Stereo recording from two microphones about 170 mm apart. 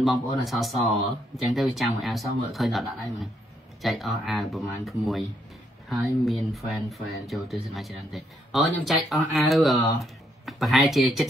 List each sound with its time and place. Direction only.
0.0 s speech: centre (ahead or behind)